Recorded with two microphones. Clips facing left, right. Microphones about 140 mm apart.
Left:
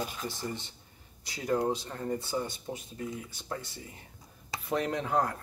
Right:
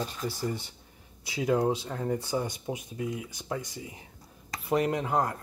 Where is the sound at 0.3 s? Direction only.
10° right (ahead or behind).